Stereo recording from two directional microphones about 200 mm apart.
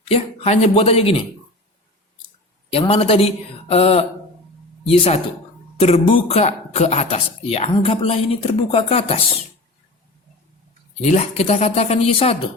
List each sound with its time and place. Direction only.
0.0 s speech: 30° left (ahead or behind)
2.7 s speech: 30° left (ahead or behind)
11.0 s speech: 35° left (ahead or behind)